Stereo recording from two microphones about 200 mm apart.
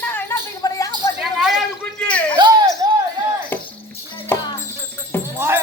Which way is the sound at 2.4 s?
20° right (ahead or behind).